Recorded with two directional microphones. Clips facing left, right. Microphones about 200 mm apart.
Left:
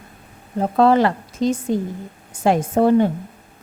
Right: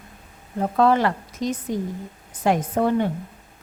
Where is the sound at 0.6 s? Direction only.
30° left (ahead or behind).